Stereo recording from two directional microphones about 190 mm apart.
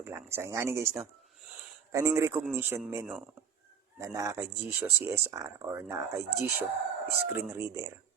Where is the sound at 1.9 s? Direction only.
15° right (ahead or behind).